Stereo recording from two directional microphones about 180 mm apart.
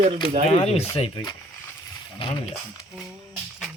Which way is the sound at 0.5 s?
35° left (ahead or behind).